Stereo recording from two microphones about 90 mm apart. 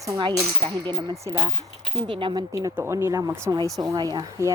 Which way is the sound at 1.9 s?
65° right (ahead or behind).